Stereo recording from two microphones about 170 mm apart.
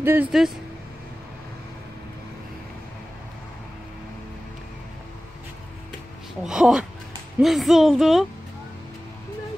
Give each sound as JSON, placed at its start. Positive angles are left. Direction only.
{"t": 0.0, "sound": "speech", "side_deg": -10}
{"t": 6.4, "sound": "speech", "side_deg": -5}